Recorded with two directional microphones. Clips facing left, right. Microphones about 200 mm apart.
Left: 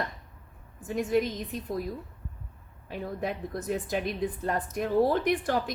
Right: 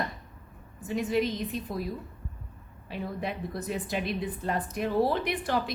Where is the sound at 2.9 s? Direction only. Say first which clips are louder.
Left 1 dB; 45° left (ahead or behind).